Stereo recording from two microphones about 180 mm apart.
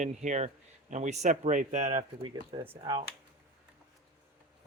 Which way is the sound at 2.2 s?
25° right (ahead or behind).